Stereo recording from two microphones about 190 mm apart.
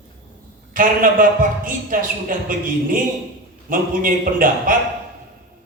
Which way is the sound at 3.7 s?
45° right (ahead or behind).